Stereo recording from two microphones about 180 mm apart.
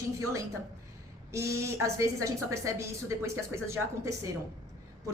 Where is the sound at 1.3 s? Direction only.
15° right (ahead or behind).